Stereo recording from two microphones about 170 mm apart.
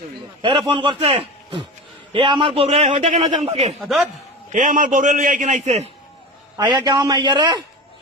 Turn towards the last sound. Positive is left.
turn(degrees=-25)  # may be behind; listen again after turning